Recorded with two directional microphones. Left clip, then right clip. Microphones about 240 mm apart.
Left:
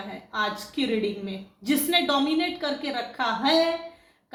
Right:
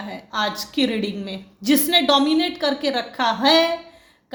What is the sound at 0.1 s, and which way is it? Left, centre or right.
A woman's voice, right.